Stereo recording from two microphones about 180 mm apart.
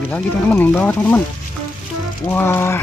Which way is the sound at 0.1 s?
10° left (ahead or behind).